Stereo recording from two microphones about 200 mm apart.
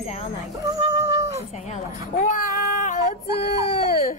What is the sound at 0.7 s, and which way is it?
Female singing, 20° right (ahead or behind).